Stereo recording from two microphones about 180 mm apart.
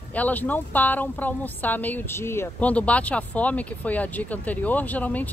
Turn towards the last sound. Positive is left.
turn(degrees=10)  # may be behind; listen again after turning